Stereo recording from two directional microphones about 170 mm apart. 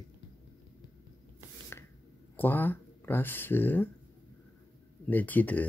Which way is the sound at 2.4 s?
10° left (ahead or behind).